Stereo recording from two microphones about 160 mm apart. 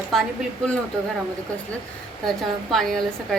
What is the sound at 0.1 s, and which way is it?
Speech, centre (ahead or behind).